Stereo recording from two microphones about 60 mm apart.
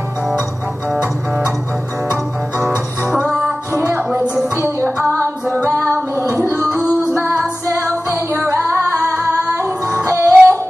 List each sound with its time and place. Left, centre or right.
3.1 s music: centre
4.6 s music: right
7.2 s music: right